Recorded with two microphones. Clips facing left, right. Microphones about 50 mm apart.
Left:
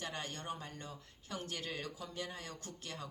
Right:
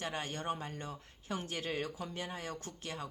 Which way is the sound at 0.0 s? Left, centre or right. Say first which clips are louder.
Right 5 dB; right.